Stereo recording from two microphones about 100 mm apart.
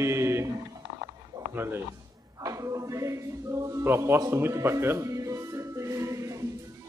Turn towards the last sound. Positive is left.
turn(degrees=-30)  # may be behind; listen again after turning